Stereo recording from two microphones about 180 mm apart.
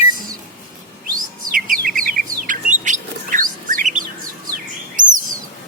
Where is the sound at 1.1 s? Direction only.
50° right (ahead or behind).